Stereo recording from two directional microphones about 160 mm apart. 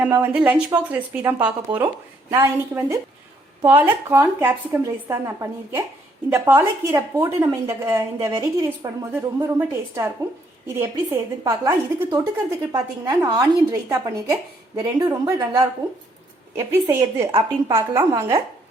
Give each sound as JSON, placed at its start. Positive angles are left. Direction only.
{"t": 0.0, "sound": "a woman's voice", "side_deg": -10}
{"t": 16.6, "sound": "a woman's voice", "side_deg": -15}